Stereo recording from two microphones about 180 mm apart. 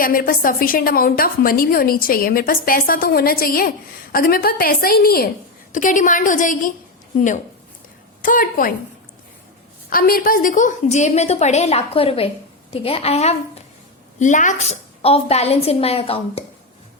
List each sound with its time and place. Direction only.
0.0 s a woman's voice: 50° left (ahead or behind)
5.7 s a woman's voice: 45° left (ahead or behind)
8.2 s a woman's voice: 50° left (ahead or behind)
9.9 s a woman's voice: 55° left (ahead or behind); by 16.4 s 35° left (ahead or behind)